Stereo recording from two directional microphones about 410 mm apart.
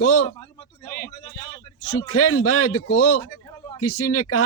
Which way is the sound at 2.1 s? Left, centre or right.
Left.